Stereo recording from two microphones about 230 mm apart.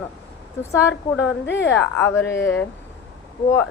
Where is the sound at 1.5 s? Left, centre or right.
Left.